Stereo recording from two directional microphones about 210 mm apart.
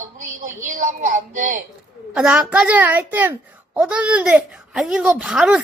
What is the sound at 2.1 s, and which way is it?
A child's voice, 5° right (ahead or behind).